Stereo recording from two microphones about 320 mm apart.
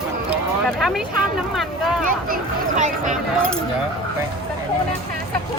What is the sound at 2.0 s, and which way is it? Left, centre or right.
Speech, right.